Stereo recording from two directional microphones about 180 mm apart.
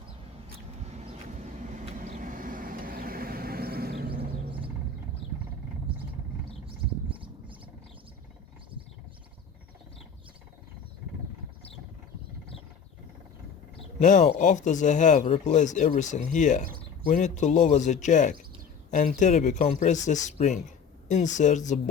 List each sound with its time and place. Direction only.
0.9 s vehicle: 35° right (ahead or behind); by 4.2 s 60° right (ahead or behind)
7.1 s bird: 30° right (ahead or behind)
14.0 s speech: 40° left (ahead or behind)